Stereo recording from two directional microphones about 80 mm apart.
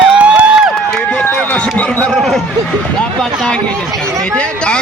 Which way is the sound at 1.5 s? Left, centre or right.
Centre.